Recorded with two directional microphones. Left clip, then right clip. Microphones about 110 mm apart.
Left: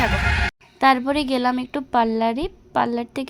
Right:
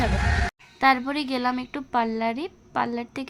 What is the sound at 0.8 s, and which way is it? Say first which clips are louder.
A woman's voice: left 4 dB; 20° left (ahead or behind).